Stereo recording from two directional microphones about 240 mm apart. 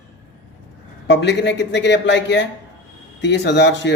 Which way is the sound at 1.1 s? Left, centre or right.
Left.